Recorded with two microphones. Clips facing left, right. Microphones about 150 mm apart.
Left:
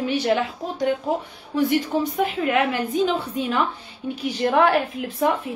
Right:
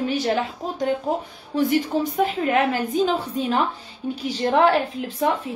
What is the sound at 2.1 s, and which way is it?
A woman's voice, 40° right (ahead or behind).